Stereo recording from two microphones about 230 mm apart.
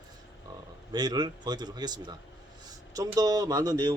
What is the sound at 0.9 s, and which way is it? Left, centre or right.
A man's voice, centre.